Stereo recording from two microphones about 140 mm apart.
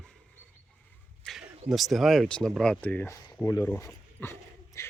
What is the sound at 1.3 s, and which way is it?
Speech, 5° left (ahead or behind).